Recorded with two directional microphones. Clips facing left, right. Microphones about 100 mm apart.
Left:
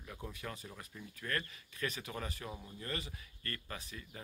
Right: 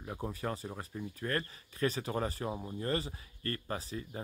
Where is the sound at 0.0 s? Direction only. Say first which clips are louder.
Right 8 dB; 35° right (ahead or behind).